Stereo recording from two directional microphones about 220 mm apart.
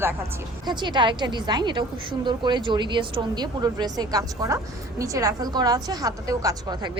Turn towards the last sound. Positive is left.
turn(degrees=-15)  # may be behind; listen again after turning